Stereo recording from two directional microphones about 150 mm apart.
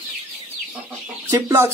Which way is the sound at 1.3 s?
15° right (ahead or behind).